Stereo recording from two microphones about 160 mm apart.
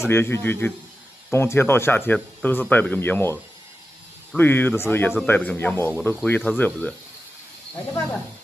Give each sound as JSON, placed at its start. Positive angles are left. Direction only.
{"t": 0.0, "sound": "speech", "side_deg": 15}
{"t": 4.4, "sound": "speech", "side_deg": 10}